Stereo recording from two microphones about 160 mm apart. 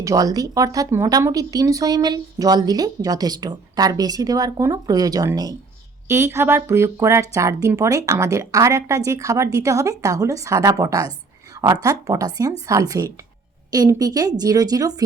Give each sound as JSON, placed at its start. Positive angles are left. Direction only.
{"t": 0.0, "sound": "speech", "side_deg": -20}